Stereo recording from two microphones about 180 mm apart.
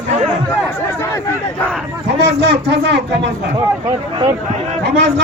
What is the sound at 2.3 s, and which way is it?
Speech, 65° right (ahead or behind).